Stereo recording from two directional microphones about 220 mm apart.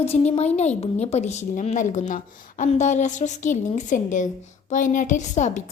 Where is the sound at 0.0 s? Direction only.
25° left (ahead or behind).